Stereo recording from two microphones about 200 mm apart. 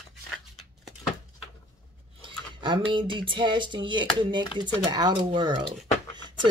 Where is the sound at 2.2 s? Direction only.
25° right (ahead or behind).